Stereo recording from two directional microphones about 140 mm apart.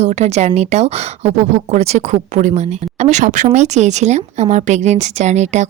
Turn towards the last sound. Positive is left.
turn(degrees=-55)  # may be behind; listen again after turning